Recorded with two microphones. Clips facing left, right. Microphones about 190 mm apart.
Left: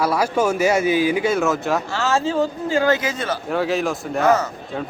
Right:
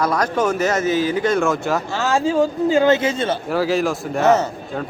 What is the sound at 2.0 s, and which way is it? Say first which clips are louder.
Speech: right 4 dB; 15° right (ahead or behind).